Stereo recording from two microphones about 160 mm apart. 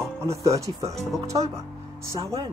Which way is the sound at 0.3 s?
20° right (ahead or behind).